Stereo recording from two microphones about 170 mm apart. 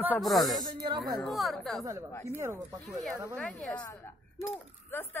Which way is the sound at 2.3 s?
15° right (ahead or behind).